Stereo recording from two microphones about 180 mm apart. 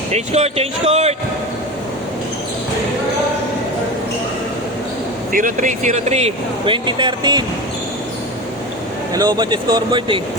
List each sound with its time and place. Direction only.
0.1 s speech: 35° right (ahead or behind)
5.3 s speech: 45° right (ahead or behind); by 7.4 s 25° right (ahead or behind)
9.1 s speech: 20° right (ahead or behind)